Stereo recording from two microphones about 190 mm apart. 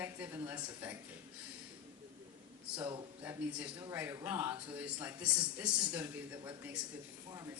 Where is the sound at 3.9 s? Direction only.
10° right (ahead or behind).